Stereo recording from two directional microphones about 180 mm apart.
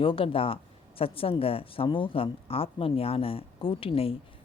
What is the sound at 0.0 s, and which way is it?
Speech, 30° left (ahead or behind).